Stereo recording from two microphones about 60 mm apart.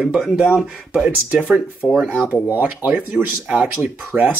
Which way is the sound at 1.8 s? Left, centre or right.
Centre.